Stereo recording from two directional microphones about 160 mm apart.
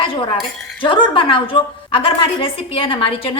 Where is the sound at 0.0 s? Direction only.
35° left (ahead or behind).